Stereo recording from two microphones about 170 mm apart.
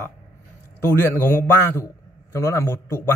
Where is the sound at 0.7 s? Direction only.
15° left (ahead or behind).